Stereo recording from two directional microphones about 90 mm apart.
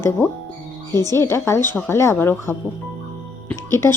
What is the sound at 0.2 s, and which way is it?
Speech, 25° left (ahead or behind).